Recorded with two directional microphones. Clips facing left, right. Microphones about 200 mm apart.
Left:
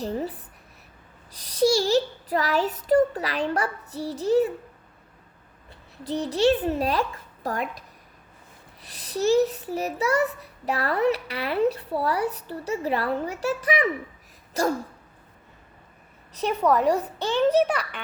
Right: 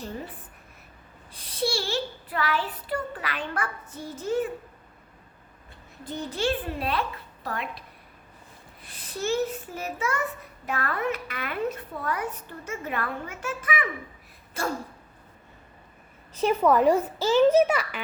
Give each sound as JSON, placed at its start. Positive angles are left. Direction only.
{"t": 1.4, "sound": "child singing", "side_deg": 40}
{"t": 6.1, "sound": "child singing", "side_deg": 35}
{"t": 8.9, "sound": "child singing", "side_deg": 40}
{"t": 16.3, "sound": "a child's voice", "side_deg": 0}